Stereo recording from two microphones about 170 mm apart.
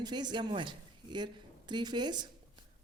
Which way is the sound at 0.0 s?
25° right (ahead or behind).